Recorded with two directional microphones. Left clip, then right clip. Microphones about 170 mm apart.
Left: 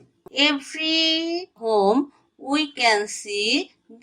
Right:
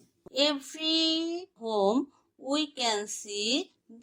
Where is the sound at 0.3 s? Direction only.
Centre (ahead or behind).